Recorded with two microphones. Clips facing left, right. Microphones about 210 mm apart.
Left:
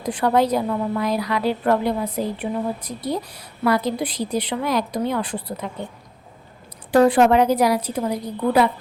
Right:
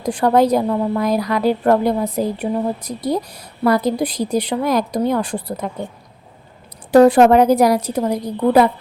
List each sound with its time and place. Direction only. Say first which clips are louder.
0.0 s a woman's voice: right 4 dB; 40° right (ahead or behind)
6.9 s a woman's voice: right 5 dB; 40° right (ahead or behind)